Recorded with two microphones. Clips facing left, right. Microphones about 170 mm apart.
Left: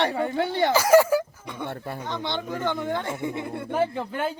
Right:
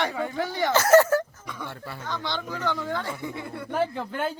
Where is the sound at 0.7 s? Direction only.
10° left (ahead or behind).